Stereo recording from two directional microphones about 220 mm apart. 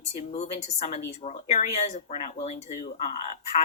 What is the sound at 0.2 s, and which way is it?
Speech, 30° left (ahead or behind).